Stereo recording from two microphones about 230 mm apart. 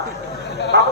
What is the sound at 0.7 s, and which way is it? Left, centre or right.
Speech, right.